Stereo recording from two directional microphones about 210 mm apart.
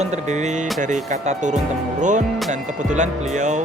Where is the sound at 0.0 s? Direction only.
35° right (ahead or behind).